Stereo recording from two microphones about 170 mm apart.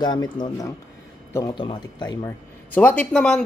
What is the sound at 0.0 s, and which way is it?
A man's voice, 25° left (ahead or behind).